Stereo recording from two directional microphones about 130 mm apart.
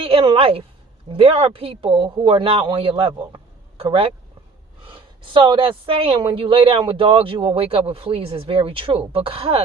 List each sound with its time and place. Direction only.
0.0 s a woman's voice: 45° right (ahead or behind)